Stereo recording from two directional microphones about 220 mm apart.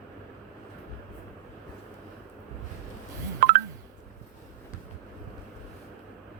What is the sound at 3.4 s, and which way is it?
Telephone dialing, 45° right (ahead or behind).